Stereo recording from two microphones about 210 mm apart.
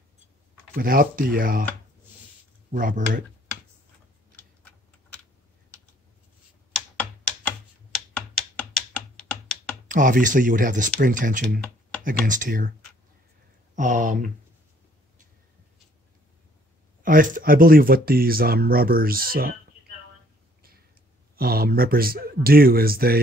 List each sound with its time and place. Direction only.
0.7 s speech: 45° right (ahead or behind)
2.7 s speech: 40° right (ahead or behind)
8.5 s computer keyboard: 5° left (ahead or behind)
9.8 s speech: 40° right (ahead or behind)
13.7 s speech: 40° right (ahead or behind)
17.0 s speech: 40° right (ahead or behind)
21.4 s speech: 45° right (ahead or behind)